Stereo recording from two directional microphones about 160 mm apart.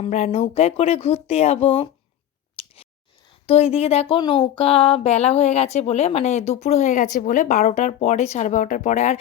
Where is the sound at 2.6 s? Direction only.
40° left (ahead or behind).